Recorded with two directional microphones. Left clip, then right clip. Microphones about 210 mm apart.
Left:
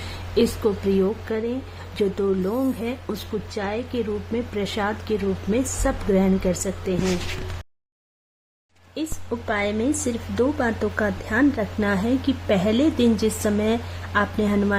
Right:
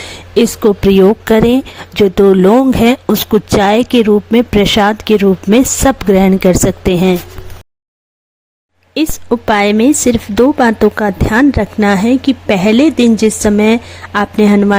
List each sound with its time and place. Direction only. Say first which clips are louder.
0.3 s a woman's voice: right 11 dB; 35° right (ahead or behind)
9.0 s a woman's voice: right 15 dB; 40° right (ahead or behind)